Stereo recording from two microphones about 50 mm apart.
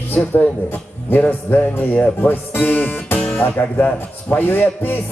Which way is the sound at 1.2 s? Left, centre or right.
Left.